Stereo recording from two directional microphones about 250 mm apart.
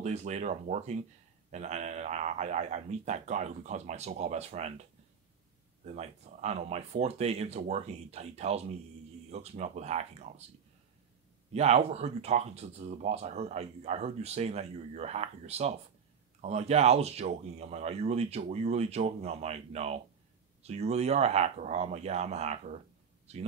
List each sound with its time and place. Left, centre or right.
0.0 s speech: right
5.9 s speech: right
11.5 s speech: right